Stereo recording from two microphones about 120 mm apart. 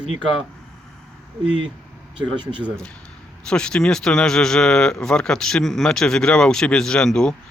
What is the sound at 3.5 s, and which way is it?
Speech, 5° left (ahead or behind).